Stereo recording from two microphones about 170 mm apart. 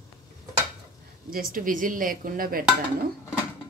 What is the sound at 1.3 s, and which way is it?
Speech, 55° right (ahead or behind).